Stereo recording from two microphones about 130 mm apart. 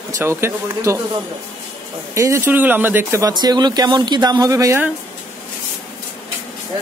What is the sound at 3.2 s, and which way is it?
Speech, 30° right (ahead or behind).